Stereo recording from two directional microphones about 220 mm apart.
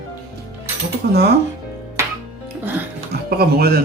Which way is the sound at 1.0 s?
45° right (ahead or behind).